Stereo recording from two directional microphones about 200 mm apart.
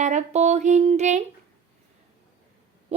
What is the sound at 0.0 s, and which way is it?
A woman's voice, 35° right (ahead or behind).